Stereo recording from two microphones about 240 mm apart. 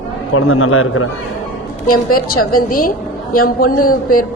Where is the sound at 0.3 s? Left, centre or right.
Left.